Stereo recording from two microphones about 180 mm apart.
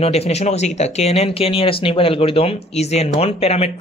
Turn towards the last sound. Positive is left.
turn(degrees=35)  # may be behind; listen again after turning